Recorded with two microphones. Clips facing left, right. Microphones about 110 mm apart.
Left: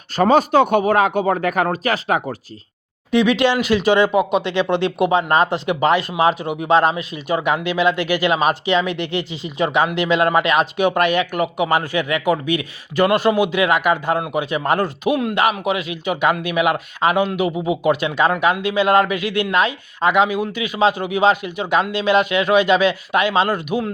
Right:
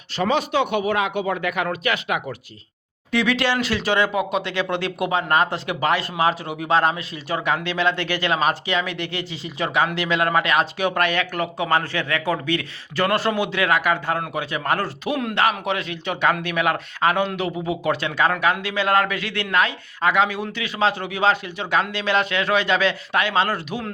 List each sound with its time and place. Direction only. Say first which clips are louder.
0.2 s speech: left 7 dB; 45° left (ahead or behind)
3.1 s a man's voice: left 5 dB; 20° left (ahead or behind)